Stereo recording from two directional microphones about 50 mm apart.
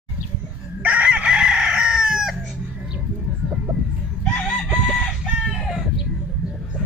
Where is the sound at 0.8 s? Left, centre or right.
Right.